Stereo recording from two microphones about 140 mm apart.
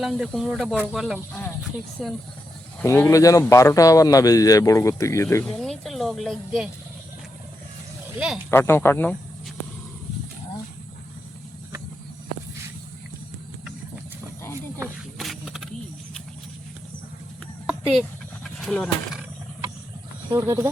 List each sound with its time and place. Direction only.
0.0 s speech: centre (ahead or behind)
2.8 s a man's voice: 20° left (ahead or behind)
5.5 s speech: centre (ahead or behind)
8.4 s speech: 15° left (ahead or behind)
15.2 s a sound: centre (ahead or behind)
18.4 s roaring cats: centre (ahead or behind)
20.3 s speech: 20° right (ahead or behind)